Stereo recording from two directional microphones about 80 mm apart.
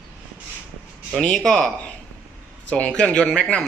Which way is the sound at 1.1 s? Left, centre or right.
Centre.